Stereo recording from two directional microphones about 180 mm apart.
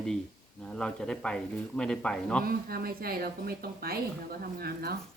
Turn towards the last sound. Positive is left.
turn(degrees=-60)  # may be behind; listen again after turning